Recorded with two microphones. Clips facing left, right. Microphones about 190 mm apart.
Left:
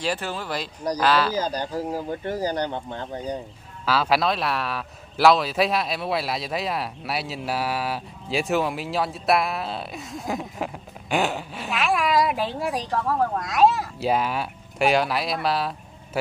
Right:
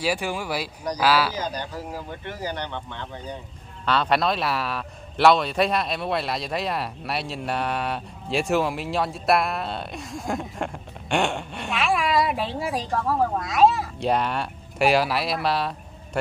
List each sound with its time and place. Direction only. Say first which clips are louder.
0.0 s speech: right 2 dB; 10° right (ahead or behind)
1.4 s speech: left 4 dB; 35° left (ahead or behind)
3.8 s a man's voice: even; 5° left (ahead or behind)